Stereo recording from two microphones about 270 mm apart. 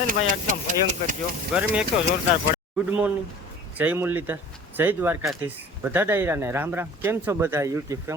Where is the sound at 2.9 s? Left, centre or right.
Centre.